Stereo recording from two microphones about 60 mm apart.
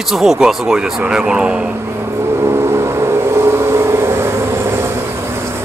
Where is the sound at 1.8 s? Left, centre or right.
Right.